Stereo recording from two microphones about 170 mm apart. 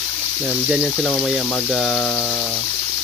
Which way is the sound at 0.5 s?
Centre (ahead or behind).